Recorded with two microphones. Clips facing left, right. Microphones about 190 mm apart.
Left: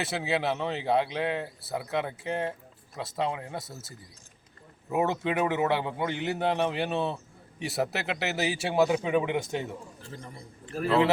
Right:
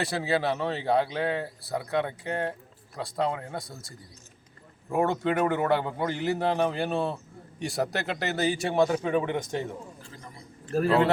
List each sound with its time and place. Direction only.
0.0 s speech: centre (ahead or behind)
10.7 s a man's voice: 40° right (ahead or behind)